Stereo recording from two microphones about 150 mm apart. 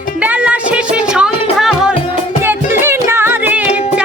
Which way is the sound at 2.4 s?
15° right (ahead or behind).